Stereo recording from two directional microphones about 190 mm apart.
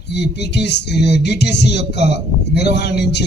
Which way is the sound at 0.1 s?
60° left (ahead or behind).